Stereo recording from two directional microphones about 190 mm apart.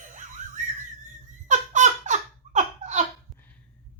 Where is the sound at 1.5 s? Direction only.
40° right (ahead or behind).